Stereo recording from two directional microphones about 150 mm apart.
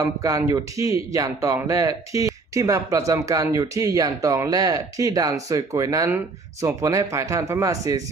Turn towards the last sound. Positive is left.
turn(degrees=-20)  # may be behind; listen again after turning